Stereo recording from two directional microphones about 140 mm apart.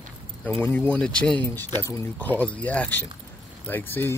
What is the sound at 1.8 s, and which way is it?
Speech, 20° left (ahead or behind).